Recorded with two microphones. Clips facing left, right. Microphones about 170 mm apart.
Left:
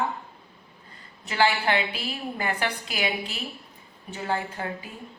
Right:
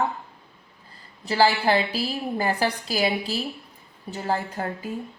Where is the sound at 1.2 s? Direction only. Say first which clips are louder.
Right 3 dB; 35° right (ahead or behind).